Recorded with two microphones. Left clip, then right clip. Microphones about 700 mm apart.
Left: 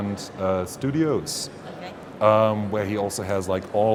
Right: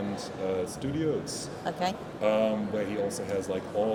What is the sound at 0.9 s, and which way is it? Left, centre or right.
Speech, left.